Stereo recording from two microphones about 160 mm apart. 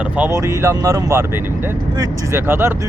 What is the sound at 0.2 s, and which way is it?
Speech, 20° right (ahead or behind).